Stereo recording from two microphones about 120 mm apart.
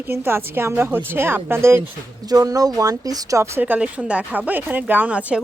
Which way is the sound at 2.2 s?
30° right (ahead or behind).